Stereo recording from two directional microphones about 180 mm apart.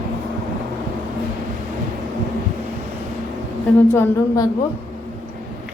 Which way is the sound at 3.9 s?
15° left (ahead or behind).